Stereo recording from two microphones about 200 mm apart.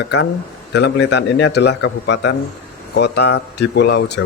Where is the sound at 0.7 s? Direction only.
60° left (ahead or behind).